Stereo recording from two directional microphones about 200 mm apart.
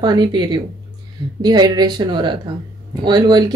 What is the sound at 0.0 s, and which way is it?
Speech, 20° right (ahead or behind).